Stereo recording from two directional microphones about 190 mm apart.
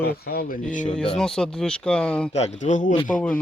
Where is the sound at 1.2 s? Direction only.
5° left (ahead or behind).